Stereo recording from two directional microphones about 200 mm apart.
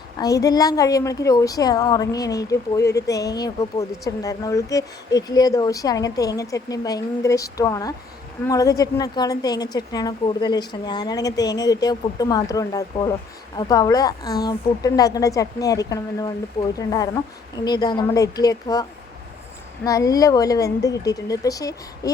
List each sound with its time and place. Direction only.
0.2 s a woman's voice: 15° left (ahead or behind)